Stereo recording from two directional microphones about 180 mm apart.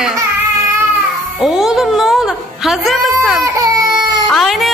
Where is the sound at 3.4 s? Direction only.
20° right (ahead or behind).